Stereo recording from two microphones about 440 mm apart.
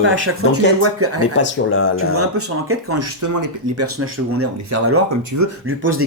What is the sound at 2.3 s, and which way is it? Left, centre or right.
Speech, right.